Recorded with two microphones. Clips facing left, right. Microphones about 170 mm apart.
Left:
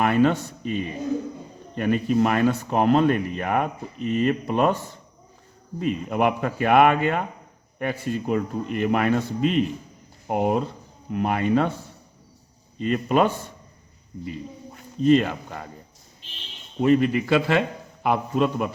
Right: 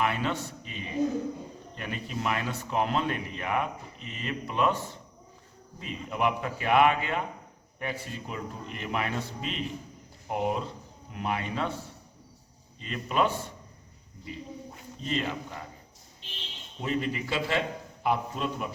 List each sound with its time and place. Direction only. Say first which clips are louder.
0.0 s speech: left 9 dB; 50° left (ahead or behind)
5.8 s speech: left 7 dB; 55° left (ahead or behind)
12.8 s speech: left 7 dB; 50° left (ahead or behind)
15.0 s speech: left 13 dB; 55° left (ahead or behind)
16.8 s a man's voice: left 11 dB; 60° left (ahead or behind)